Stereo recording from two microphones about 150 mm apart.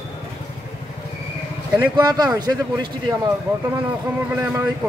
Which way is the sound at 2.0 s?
25° right (ahead or behind).